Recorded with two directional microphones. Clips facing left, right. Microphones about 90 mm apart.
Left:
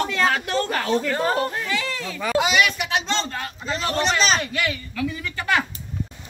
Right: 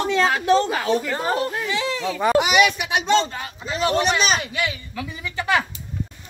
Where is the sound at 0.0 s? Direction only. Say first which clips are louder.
Right 2 dB; 15° right (ahead or behind).